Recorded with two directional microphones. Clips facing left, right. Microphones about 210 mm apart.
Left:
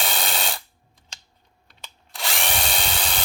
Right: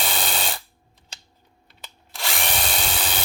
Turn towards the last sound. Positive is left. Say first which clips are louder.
# even
turn(degrees=-5)  # may be behind; listen again after turning